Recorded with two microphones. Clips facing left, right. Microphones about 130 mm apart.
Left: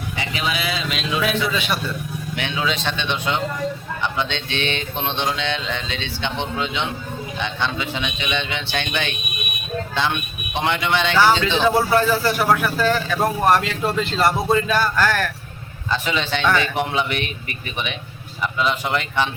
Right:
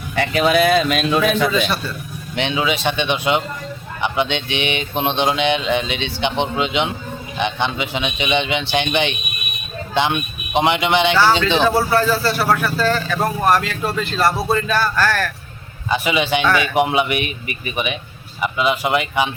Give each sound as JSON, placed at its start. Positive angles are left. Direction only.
{"t": 0.2, "sound": "speech", "side_deg": -55}
{"t": 2.3, "sound": "speech", "side_deg": -20}
{"t": 2.6, "sound": "mantra", "side_deg": -10}
{"t": 10.5, "sound": "a man's voice", "side_deg": -20}
{"t": 11.2, "sound": "a man's voice", "side_deg": 15}
{"t": 15.9, "sound": "mantra", "side_deg": -10}
{"t": 18.4, "sound": "mantra", "side_deg": -10}